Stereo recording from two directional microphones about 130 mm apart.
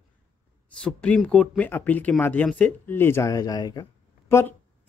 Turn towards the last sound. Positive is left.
turn(degrees=20)  # may be behind; listen again after turning